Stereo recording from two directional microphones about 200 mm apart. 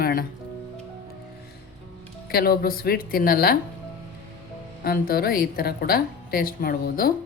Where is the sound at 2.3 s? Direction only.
50° left (ahead or behind).